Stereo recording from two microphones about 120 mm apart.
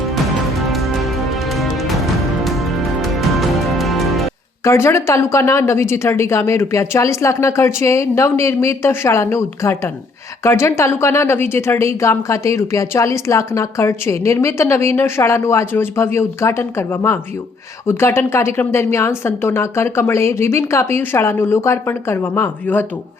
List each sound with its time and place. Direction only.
0.6 s music: centre (ahead or behind)
4.6 s a woman's voice: 20° left (ahead or behind)